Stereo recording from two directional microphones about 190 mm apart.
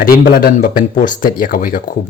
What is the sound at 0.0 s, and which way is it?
Speech, 50° left (ahead or behind).